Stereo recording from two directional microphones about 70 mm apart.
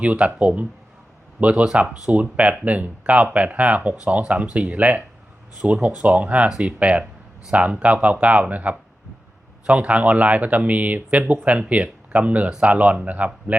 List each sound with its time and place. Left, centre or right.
0.0 s speech: centre